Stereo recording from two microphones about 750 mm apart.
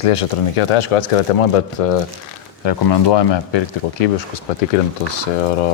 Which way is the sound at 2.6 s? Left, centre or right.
Left.